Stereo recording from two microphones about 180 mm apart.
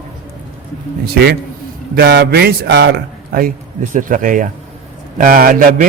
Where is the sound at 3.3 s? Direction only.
55° right (ahead or behind).